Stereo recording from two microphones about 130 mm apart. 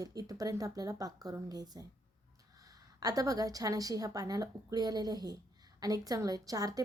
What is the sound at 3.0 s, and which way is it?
A woman's voice, 30° right (ahead or behind).